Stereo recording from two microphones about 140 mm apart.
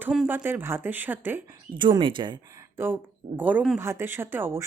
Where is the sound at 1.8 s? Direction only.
35° right (ahead or behind).